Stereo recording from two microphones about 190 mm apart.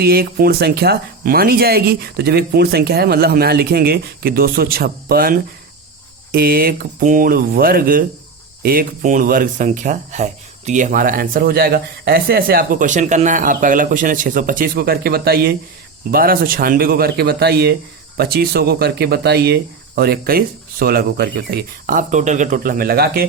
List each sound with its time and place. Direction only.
0.0 s speech: 55° right (ahead or behind)